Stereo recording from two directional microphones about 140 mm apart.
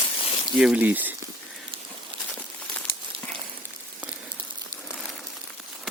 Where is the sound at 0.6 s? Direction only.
10° right (ahead or behind).